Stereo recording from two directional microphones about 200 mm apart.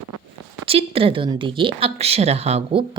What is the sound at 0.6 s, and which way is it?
A woman's voice, 30° right (ahead or behind).